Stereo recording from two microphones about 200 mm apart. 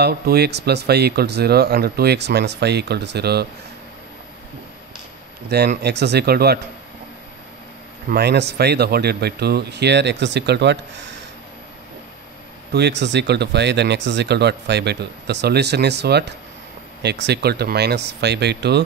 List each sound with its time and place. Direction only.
0.0 s speech: 55° right (ahead or behind)
5.8 s speech: 55° right (ahead or behind)
8.1 s speech: 55° right (ahead or behind)
12.7 s speech: 60° right (ahead or behind)